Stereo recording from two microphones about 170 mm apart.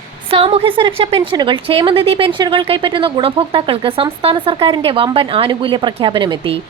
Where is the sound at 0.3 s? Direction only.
35° right (ahead or behind).